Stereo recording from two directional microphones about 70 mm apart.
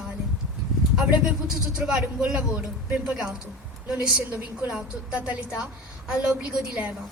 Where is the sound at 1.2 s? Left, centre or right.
Centre.